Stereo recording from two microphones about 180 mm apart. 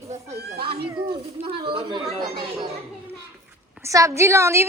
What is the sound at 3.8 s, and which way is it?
Speech, 15° right (ahead or behind).